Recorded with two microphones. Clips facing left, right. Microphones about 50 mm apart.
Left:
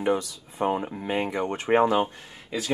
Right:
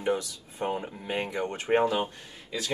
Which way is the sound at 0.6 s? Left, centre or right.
Centre.